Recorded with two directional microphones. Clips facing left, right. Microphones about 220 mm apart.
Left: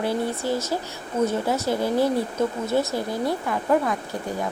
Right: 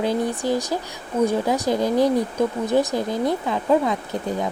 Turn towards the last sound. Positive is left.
turn(degrees=-20)  # may be behind; listen again after turning